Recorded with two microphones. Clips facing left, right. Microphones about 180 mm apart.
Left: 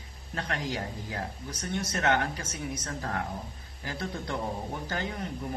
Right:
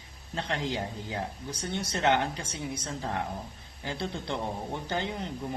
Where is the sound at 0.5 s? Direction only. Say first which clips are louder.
Right 1 dB; 25° right (ahead or behind).